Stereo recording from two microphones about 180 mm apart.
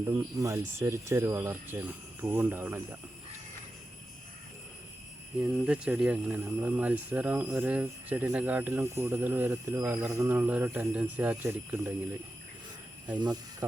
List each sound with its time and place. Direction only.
0.1 s speech: 15° right (ahead or behind)
5.4 s speech: 5° right (ahead or behind)
13.1 s speech: 25° right (ahead or behind)